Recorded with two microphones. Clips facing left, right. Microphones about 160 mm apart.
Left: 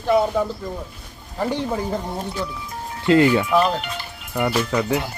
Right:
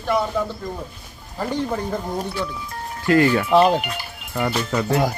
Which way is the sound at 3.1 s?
20° left (ahead or behind).